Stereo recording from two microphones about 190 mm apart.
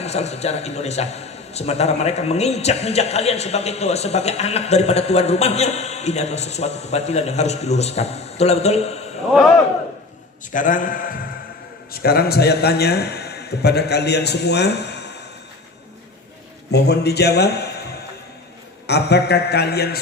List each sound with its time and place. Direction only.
0.0 s a man's voice: 35° left (ahead or behind)
10.5 s a man's voice: 45° left (ahead or behind); by 15.0 s 60° left (ahead or behind)
16.7 s a man's voice: 60° left (ahead or behind)
18.9 s a man's voice: 60° left (ahead or behind)